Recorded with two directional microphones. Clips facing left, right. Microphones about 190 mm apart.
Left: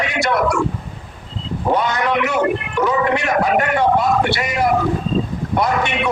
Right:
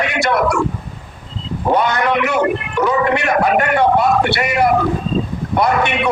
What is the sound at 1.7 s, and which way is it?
A man's voice, 60° right (ahead or behind).